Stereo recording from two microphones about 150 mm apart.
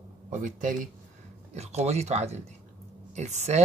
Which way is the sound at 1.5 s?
45° right (ahead or behind).